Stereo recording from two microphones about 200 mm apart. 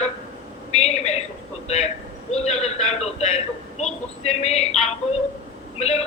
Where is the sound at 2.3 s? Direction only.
35° left (ahead or behind).